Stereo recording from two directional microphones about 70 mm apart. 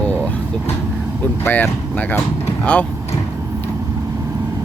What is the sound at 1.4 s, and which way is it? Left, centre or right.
Speech, left.